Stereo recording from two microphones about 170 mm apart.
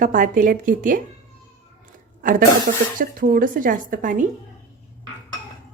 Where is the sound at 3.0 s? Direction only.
55° right (ahead or behind).